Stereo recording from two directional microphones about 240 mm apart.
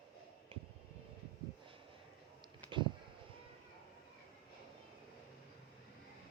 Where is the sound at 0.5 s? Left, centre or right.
Right.